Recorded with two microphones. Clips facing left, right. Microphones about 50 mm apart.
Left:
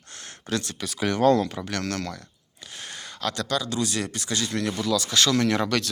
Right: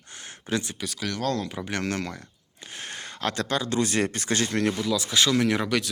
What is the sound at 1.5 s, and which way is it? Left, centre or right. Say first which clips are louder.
Speech: even; centre.